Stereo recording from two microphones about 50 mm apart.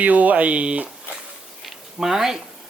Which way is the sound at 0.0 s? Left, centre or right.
Right.